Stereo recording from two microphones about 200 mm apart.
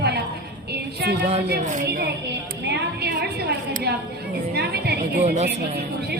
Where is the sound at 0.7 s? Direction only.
55° right (ahead or behind).